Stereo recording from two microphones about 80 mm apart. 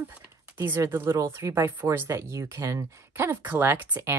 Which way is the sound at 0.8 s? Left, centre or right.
Right.